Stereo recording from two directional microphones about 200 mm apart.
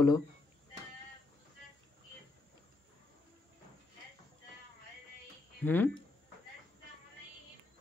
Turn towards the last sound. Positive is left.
turn(degrees=10)  # may be behind; listen again after turning